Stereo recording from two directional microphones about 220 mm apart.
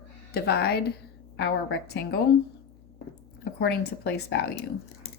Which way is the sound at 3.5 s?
50° left (ahead or behind).